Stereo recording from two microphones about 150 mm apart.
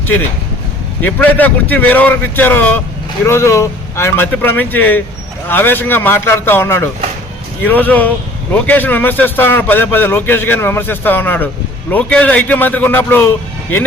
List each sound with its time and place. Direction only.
1.0 s a man's voice: 10° left (ahead or behind)